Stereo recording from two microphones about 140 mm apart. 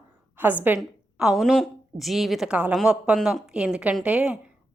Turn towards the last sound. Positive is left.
turn(degrees=-10)  # may be behind; listen again after turning